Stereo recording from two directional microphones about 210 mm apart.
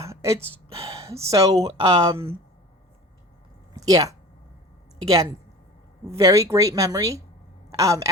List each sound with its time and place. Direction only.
0.0 s a woman's voice: 15° right (ahead or behind)
3.8 s a woman's voice: 15° right (ahead or behind)